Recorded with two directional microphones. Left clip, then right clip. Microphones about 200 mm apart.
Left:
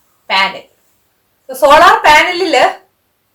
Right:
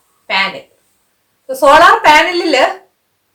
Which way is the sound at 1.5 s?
15° right (ahead or behind).